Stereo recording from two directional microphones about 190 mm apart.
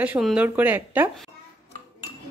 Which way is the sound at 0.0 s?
5° right (ahead or behind).